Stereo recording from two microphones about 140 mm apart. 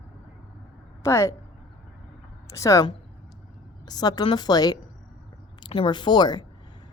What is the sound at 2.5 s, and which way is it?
Speech, 20° left (ahead or behind).